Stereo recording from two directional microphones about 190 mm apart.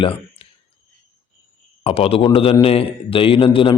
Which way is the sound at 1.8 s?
30° left (ahead or behind).